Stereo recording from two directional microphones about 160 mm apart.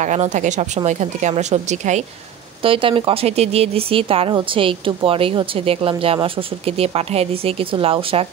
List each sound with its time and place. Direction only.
0.0 s speech: 50° right (ahead or behind)
2.6 s speech: 35° right (ahead or behind)